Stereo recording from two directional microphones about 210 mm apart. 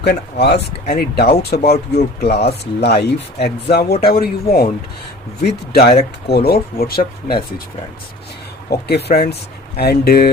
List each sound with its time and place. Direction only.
0.0 s speech: 50° left (ahead or behind)
8.7 s speech: 50° left (ahead or behind)